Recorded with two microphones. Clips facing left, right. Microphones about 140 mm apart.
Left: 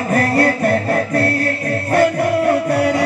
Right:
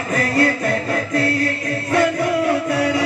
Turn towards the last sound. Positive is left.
turn(degrees=60)  # may be behind; listen again after turning